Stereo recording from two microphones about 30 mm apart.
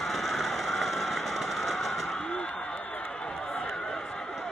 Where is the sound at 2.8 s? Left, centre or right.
Left.